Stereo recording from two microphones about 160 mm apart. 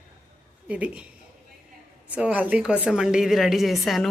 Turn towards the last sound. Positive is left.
turn(degrees=0)  # may be behind; listen again after turning